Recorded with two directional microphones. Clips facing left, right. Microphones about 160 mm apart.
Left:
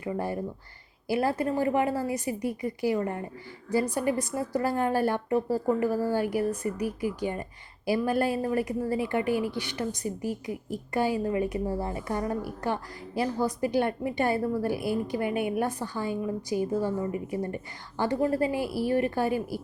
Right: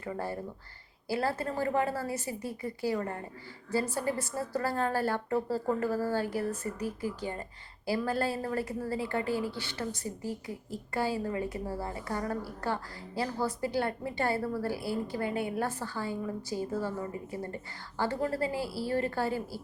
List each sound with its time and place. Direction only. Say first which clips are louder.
0.0 s a woman's voice: left 5 dB; 15° left (ahead or behind)